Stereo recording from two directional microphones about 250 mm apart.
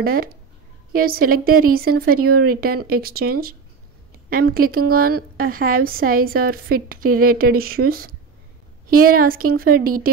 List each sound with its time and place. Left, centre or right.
0.0 s a woman's voice: right